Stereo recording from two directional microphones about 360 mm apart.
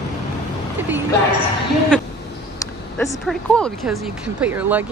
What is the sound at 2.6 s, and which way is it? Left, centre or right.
Speech, centre.